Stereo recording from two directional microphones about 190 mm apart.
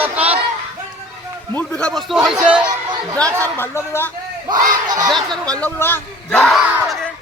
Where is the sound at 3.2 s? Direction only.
15° right (ahead or behind).